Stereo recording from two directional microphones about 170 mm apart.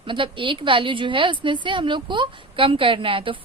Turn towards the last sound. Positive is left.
turn(degrees=-30)  # may be behind; listen again after turning